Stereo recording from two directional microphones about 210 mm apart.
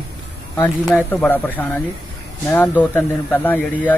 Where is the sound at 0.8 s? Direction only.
5° right (ahead or behind).